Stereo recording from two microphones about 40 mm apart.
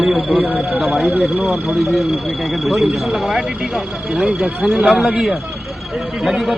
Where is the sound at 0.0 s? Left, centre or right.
Centre.